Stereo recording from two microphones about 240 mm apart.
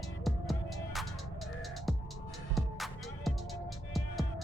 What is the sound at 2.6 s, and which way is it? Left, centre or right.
Music, centre.